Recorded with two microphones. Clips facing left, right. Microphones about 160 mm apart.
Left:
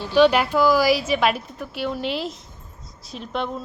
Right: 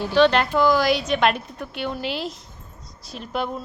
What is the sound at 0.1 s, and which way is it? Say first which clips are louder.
A woman's voice: left 2 dB; 10° left (ahead or behind).